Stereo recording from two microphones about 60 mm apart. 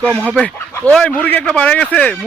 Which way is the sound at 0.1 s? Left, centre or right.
Right.